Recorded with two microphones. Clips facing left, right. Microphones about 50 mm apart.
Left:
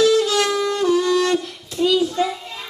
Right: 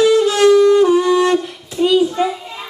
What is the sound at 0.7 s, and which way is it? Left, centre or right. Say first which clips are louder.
Music: right 7 dB; centre.